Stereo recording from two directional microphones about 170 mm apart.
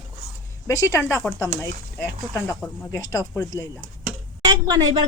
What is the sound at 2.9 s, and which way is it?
Speech, 20° left (ahead or behind).